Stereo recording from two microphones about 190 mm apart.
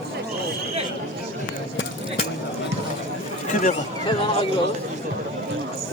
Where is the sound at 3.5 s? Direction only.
40° left (ahead or behind).